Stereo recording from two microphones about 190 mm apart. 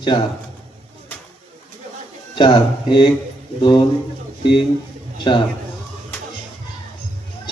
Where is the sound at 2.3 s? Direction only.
25° left (ahead or behind).